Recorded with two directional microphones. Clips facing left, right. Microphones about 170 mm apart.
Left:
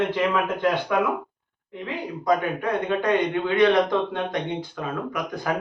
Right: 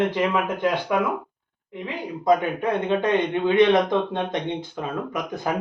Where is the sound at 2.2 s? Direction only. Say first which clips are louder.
Right 3 dB; 20° right (ahead or behind).